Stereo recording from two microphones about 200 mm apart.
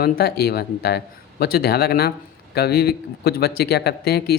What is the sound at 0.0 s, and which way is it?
Speech, 50° left (ahead or behind).